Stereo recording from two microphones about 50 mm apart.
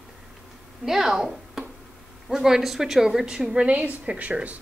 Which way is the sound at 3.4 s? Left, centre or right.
Right.